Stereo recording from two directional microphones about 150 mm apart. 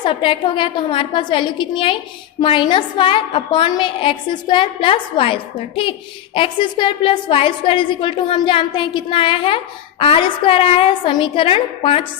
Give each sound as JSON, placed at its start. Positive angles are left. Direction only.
{"t": 0.0, "sound": "a woman's voice", "side_deg": 35}